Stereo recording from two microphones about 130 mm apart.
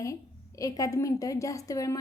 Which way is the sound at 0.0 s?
25° left (ahead or behind).